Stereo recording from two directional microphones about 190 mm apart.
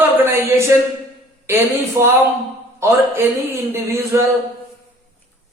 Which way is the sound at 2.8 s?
10° right (ahead or behind).